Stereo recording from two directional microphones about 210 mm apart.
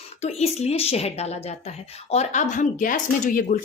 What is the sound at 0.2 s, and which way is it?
A woman's voice, 30° left (ahead or behind).